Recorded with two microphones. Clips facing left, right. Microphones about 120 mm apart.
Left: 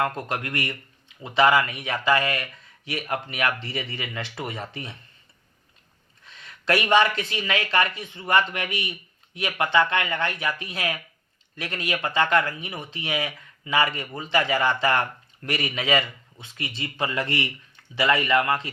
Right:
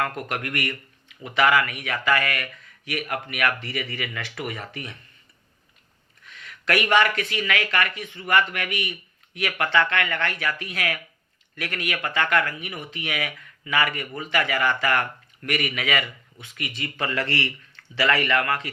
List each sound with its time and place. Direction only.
0.0 s speech: 25° left (ahead or behind)
6.2 s speech: 25° left (ahead or behind)